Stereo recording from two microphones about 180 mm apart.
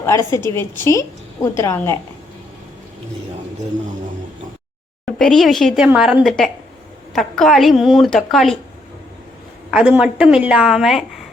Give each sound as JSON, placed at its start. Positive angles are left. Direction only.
{"t": 0.0, "sound": "a woman's voice", "side_deg": 15}
{"t": 5.1, "sound": "a woman's voice", "side_deg": 0}
{"t": 9.7, "sound": "a woman's voice", "side_deg": -5}